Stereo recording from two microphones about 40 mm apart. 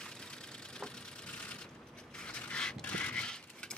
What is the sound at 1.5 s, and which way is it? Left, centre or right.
Mechanisms, left.